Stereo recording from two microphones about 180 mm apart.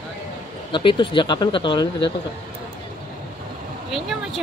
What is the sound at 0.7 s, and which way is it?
Speech, 25° left (ahead or behind).